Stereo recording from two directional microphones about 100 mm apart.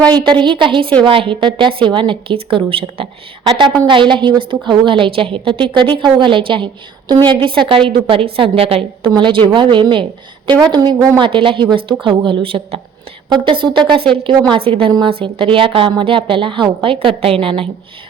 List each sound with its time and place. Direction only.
0.0 s a woman's voice: 45° right (ahead or behind); by 3.1 s 65° right (ahead or behind)
3.8 s a woman's voice: 55° right (ahead or behind); by 8.8 s 75° right (ahead or behind)
9.1 s a woman's voice: 55° right (ahead or behind)
11.2 s a woman's voice: 55° right (ahead or behind)